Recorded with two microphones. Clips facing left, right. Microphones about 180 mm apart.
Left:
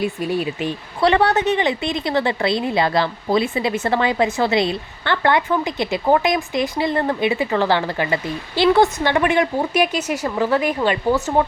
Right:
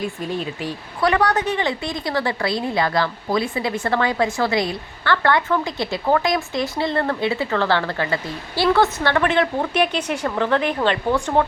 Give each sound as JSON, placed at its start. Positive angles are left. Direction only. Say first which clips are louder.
{"t": 0.0, "sound": "a woman's voice", "louder": "left 4 dB", "side_deg": 10}